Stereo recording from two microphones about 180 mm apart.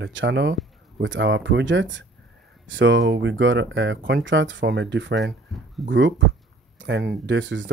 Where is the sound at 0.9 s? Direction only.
90° right.